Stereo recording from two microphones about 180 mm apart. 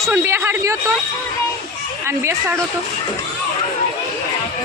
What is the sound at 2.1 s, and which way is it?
Speech, 15° right (ahead or behind).